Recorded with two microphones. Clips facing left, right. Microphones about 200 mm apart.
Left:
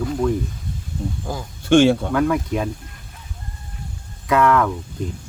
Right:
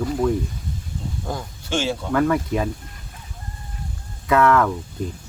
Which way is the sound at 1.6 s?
55° left (ahead or behind).